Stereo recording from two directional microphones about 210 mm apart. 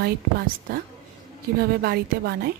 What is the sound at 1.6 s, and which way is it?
Speech, 45° right (ahead or behind).